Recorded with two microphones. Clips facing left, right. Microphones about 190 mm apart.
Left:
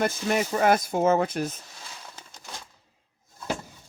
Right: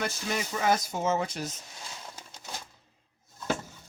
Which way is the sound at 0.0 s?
55° left (ahead or behind).